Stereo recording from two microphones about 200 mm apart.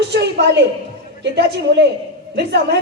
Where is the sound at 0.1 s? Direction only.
60° right (ahead or behind).